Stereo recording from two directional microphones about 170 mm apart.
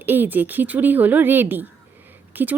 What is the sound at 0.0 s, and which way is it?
Speech, 10° right (ahead or behind).